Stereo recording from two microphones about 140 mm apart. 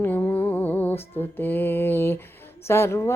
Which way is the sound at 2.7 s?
20° left (ahead or behind).